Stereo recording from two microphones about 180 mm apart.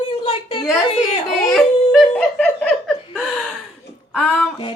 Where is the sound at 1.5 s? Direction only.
5° left (ahead or behind).